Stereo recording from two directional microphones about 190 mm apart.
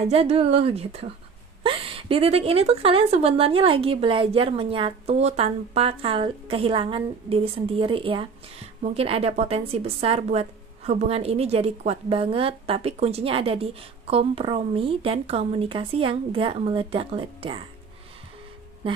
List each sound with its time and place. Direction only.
0.1 s a woman's voice: 30° right (ahead or behind)